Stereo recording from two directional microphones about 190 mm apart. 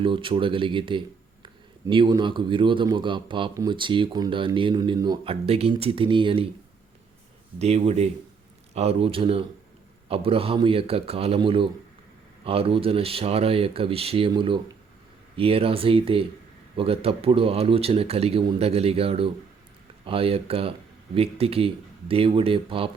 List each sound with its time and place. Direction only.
0.0 s a man's voice: 25° right (ahead or behind)
7.6 s a man's voice: 35° right (ahead or behind)